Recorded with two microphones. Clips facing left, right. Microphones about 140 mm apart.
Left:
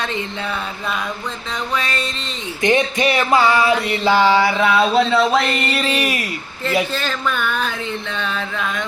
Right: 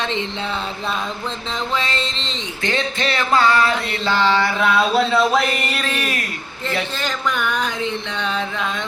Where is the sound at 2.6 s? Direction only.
15° left (ahead or behind).